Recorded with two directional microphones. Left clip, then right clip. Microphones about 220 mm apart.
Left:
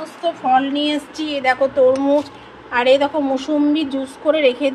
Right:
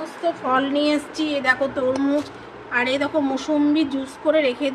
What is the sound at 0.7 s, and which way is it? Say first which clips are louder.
Speech: even; centre (ahead or behind).